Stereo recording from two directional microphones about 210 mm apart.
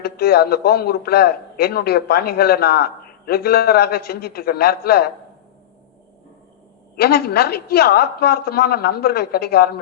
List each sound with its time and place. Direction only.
0.0 s a man's voice: 50° left (ahead or behind)
6.9 s a man's voice: 50° left (ahead or behind)